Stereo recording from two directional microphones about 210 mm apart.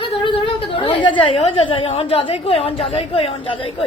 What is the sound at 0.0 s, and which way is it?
A woman's voice, 25° left (ahead or behind).